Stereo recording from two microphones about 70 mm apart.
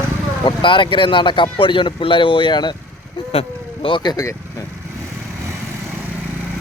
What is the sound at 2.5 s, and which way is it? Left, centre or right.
Speech, left.